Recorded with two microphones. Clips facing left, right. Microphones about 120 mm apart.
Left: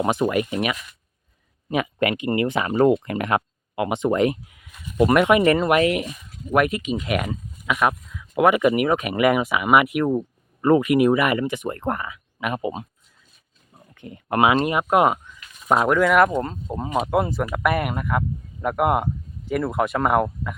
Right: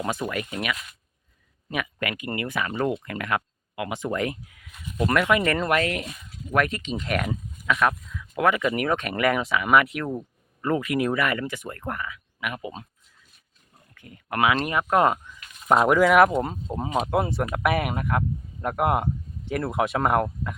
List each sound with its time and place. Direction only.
0.0 s speech: 20° left (ahead or behind)
10.1 s speech: 25° left (ahead or behind)
13.7 s speech: 25° left (ahead or behind)
15.6 s speech: centre (ahead or behind)